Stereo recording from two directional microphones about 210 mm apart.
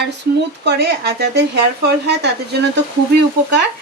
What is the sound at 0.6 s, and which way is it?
Speech, 50° right (ahead or behind).